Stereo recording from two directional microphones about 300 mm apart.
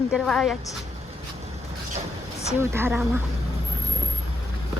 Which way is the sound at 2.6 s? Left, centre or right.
Centre.